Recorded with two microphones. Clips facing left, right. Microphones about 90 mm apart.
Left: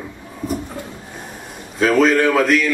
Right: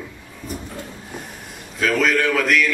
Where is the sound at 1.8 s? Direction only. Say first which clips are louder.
Left 5 dB; 30° left (ahead or behind).